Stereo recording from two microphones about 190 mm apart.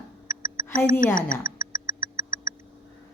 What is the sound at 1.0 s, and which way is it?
Speech, 45° left (ahead or behind).